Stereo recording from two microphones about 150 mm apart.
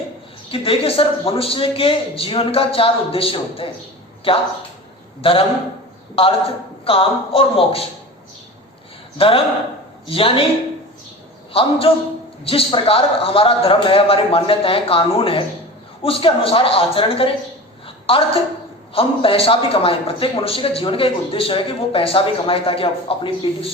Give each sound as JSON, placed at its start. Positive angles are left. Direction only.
{"t": 0.5, "sound": "a man's voice", "side_deg": 40}
{"t": 5.2, "sound": "a man's voice", "side_deg": 35}
{"t": 9.1, "sound": "a man's voice", "side_deg": 40}
{"t": 11.5, "sound": "a man's voice", "side_deg": 40}
{"t": 17.8, "sound": "a sound", "side_deg": 40}
{"t": 18.9, "sound": "a man's voice", "side_deg": 40}